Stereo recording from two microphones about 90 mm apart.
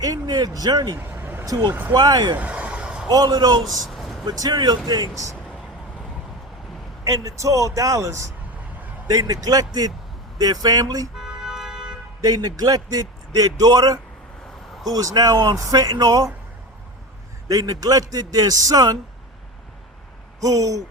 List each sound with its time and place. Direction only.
0.0 s a man's voice: 45° right (ahead or behind)
0.9 s a sound: 25° right (ahead or behind)
1.5 s a man's voice: 40° right (ahead or behind)
2.4 s vehicle: 15° right (ahead or behind)
3.1 s a man's voice: 45° right (ahead or behind)
3.6 s a sound: centre (ahead or behind)
4.3 s a man's voice: 45° right (ahead or behind)
7.0 s a man's voice: 40° right (ahead or behind)
11.1 s music: 5° right (ahead or behind)
12.2 s a man's voice: 50° right (ahead or behind)
17.5 s a man's voice: 40° right (ahead or behind)
20.4 s a man's voice: 40° right (ahead or behind)